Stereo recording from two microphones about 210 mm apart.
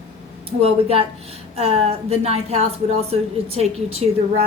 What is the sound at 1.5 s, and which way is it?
A woman's voice, 30° right (ahead or behind).